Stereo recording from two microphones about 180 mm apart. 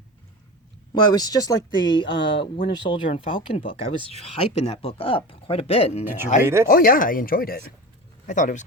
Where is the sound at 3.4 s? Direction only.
30° left (ahead or behind).